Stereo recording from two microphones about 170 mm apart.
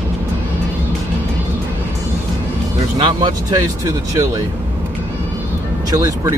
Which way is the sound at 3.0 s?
25° right (ahead or behind).